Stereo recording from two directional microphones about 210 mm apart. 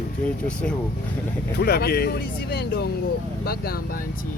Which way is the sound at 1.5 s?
50° left (ahead or behind).